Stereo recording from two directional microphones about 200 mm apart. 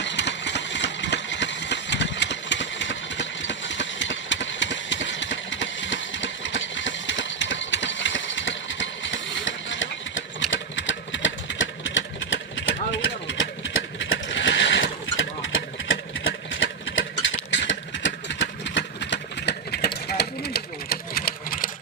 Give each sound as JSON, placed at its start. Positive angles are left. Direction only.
{"t": 0.0, "sound": "engine", "side_deg": 65}